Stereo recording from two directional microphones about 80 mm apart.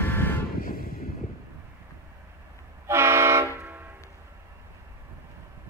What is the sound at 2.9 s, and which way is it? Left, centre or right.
Vehicle, right.